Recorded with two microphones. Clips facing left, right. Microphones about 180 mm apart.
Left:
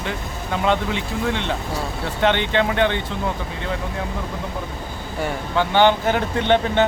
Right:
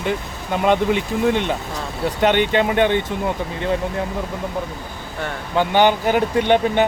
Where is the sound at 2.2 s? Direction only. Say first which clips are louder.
Right 2 dB; 15° right (ahead or behind).